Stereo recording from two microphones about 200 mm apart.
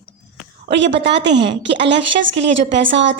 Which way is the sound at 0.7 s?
65° right (ahead or behind).